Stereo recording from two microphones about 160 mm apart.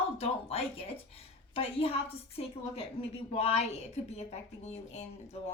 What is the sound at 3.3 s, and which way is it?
A woman's voice, 40° left (ahead or behind).